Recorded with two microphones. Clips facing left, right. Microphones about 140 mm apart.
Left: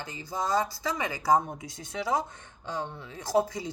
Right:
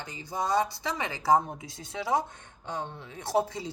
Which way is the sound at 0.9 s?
25° right (ahead or behind).